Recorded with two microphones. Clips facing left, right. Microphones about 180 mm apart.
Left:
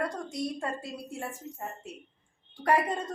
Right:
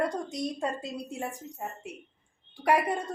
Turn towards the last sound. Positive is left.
turn(degrees=-10)  # may be behind; listen again after turning